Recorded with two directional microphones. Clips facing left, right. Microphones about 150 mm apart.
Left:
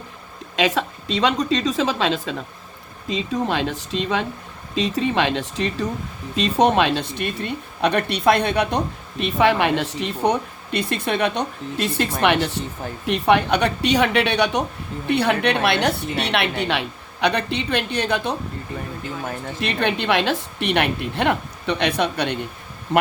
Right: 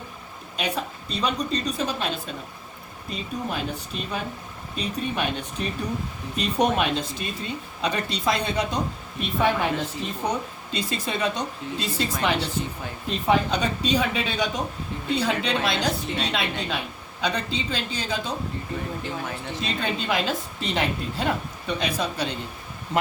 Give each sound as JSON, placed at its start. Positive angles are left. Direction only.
{"t": 0.5, "sound": "a woman's voice", "side_deg": 90}
{"t": 19.5, "sound": "a woman's voice", "side_deg": 70}